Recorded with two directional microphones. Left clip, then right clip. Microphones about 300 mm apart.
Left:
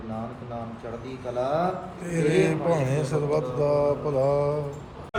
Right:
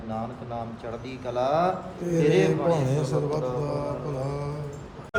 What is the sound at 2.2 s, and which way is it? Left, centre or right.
Mantra, centre.